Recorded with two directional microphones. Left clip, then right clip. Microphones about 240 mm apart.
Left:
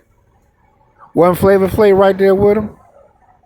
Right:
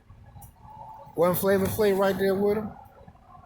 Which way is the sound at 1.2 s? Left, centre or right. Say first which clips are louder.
Left 13 dB; left.